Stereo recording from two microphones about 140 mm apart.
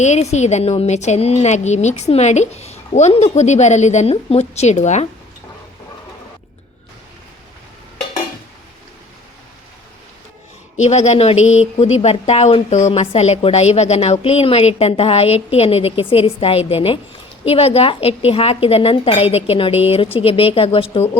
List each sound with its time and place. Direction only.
0.0 s a woman's voice: 55° left (ahead or behind)
10.8 s a woman's voice: 55° left (ahead or behind)